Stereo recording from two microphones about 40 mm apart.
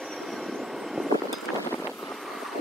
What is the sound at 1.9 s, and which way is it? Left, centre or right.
Vehicle, centre.